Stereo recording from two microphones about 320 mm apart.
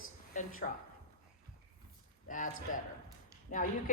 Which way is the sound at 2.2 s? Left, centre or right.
Left.